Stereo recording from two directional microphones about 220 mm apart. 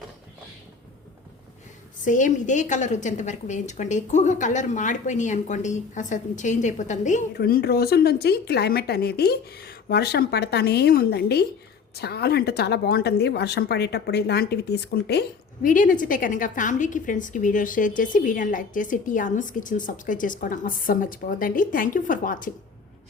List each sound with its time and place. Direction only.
2.0 s a woman's voice: 35° left (ahead or behind)
7.3 s speech: 45° left (ahead or behind)
15.6 s a woman's voice: 40° left (ahead or behind)